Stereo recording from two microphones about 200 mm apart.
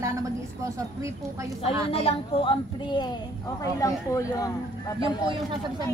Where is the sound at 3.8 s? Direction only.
15° left (ahead or behind).